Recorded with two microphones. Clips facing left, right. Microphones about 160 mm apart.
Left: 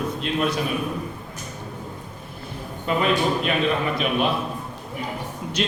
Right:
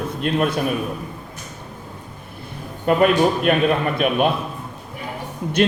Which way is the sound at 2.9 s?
55° right (ahead or behind).